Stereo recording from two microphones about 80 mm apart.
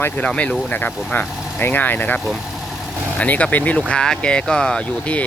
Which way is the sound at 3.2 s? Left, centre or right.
Centre.